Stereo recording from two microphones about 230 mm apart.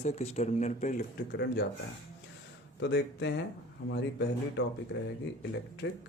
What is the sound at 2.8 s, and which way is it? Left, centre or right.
Speech, left.